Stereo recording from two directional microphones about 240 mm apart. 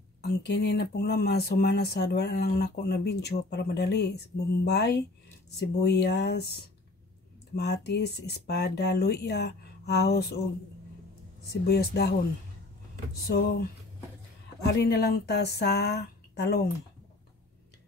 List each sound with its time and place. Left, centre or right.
0.2 s speech: left
7.5 s speech: left
11.6 s speech: left
13.3 s speech: left